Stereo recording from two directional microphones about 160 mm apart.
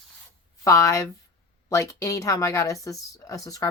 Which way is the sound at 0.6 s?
20° left (ahead or behind).